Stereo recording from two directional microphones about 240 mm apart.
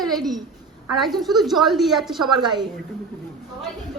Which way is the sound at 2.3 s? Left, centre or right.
Centre.